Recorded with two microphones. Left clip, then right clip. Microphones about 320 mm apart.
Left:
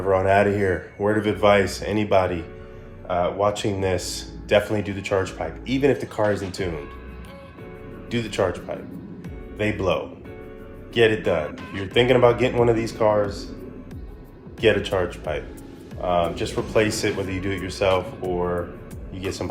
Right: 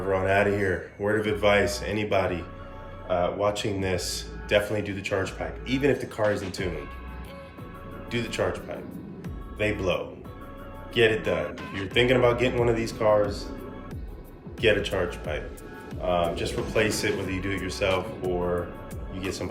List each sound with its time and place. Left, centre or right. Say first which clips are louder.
0.1 s speech: left 5 dB; centre
8.1 s speech: left 4 dB; centre
14.6 s speech: left 3 dB; centre